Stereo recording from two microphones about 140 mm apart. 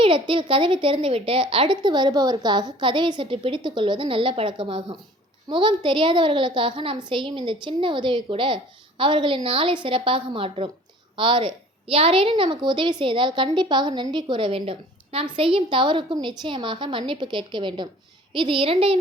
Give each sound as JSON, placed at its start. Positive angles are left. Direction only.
{"t": 0.0, "sound": "a woman's voice", "side_deg": -35}